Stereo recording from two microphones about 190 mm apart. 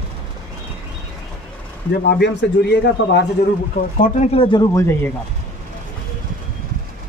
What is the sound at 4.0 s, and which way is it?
Speech, 35° left (ahead or behind).